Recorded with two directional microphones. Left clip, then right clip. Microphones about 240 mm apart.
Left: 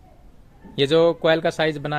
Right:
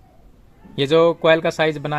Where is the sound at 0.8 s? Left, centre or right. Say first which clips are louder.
Right 2 dB; right.